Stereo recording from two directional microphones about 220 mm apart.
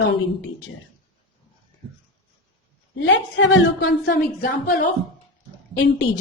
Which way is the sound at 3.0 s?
55° left (ahead or behind).